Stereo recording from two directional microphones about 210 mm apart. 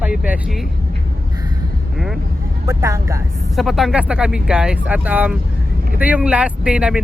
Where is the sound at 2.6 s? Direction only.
15° right (ahead or behind).